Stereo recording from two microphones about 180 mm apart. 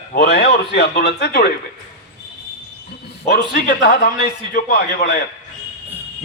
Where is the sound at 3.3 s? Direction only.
60° left (ahead or behind).